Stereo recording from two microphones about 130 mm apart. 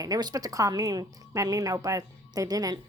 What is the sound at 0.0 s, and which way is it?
A woman's voice, 30° right (ahead or behind).